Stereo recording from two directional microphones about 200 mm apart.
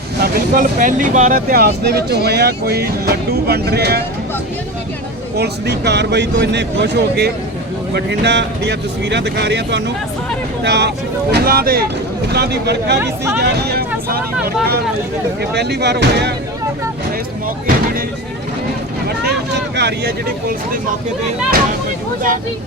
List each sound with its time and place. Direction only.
0.2 s speech: 45° right (ahead or behind)
5.4 s speech: 55° right (ahead or behind)
15.4 s speech: 55° right (ahead or behind)
19.0 s vehicle: 60° right (ahead or behind)